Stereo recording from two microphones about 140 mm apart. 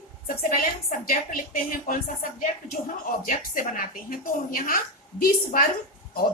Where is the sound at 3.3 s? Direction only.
80° left.